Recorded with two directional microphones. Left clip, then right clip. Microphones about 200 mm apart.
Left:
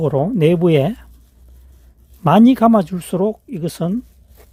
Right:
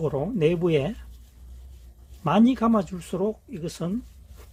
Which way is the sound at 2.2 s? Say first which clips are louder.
Left 10 dB; 50° left (ahead or behind).